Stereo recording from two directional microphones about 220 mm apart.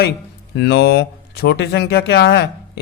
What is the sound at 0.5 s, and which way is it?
A man's voice, 50° left (ahead or behind).